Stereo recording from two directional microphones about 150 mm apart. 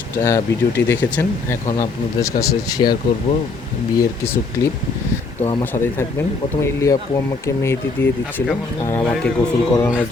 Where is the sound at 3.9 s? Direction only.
20° left (ahead or behind).